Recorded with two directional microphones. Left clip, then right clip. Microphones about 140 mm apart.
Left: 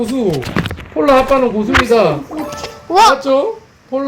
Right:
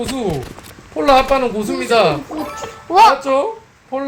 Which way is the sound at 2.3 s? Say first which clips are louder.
Left 2 dB; 5° right (ahead or behind).